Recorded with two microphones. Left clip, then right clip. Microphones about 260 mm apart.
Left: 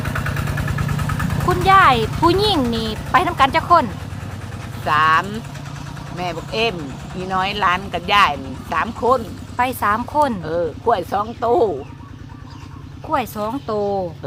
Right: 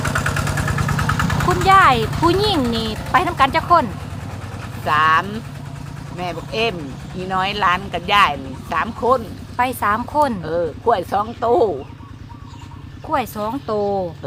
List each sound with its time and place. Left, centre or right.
0.0 s vehicle: right
1.5 s speech: centre
4.9 s speech: centre
13.1 s speech: centre